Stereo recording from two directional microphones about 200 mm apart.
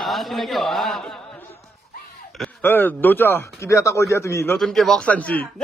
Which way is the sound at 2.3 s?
Centre (ahead or behind).